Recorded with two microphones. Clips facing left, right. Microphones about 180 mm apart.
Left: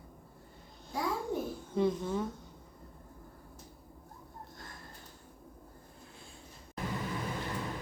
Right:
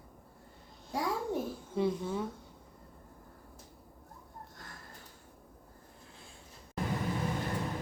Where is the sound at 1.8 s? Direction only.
5° right (ahead or behind).